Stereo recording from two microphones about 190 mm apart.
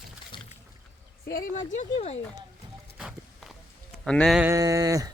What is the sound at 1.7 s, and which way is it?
Speech, 35° left (ahead or behind).